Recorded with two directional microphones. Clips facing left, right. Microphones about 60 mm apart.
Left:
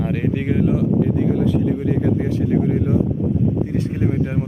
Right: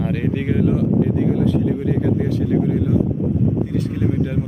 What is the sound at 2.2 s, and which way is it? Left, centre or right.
Speech, left.